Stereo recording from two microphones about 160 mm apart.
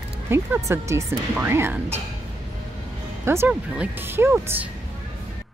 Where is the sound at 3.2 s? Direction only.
15° right (ahead or behind).